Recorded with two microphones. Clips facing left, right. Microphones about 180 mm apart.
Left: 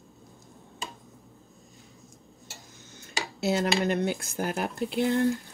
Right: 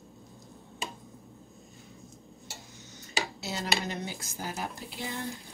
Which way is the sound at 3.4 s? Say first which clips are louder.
Left 13 dB; 60° left (ahead or behind).